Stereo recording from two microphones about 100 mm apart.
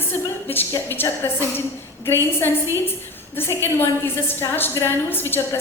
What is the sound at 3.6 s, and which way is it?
A woman's voice, 20° left (ahead or behind).